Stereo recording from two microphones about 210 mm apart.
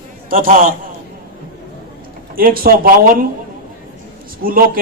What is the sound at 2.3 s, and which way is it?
Speech, 45° right (ahead or behind).